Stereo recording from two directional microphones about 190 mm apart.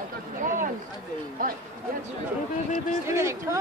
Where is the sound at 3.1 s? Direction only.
15° right (ahead or behind).